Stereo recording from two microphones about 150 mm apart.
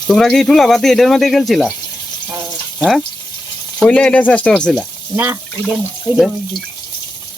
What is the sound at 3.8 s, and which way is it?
Speech, 5° left (ahead or behind).